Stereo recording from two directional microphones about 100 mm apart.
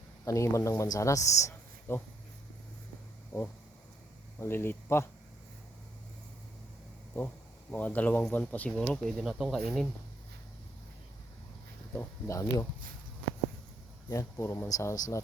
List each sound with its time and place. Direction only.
0.3 s speech: 30° left (ahead or behind)
3.3 s speech: 25° left (ahead or behind)
7.7 s speech: 15° left (ahead or behind)
11.9 s speech: 35° left (ahead or behind)
14.1 s speech: 30° left (ahead or behind)